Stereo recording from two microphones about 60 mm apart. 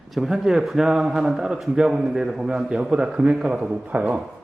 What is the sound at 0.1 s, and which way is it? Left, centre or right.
Speech, centre.